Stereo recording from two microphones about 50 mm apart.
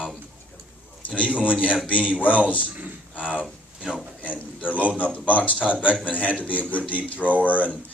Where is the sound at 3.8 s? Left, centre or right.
Centre.